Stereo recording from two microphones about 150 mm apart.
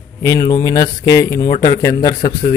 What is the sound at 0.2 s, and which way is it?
A man's voice, 25° left (ahead or behind).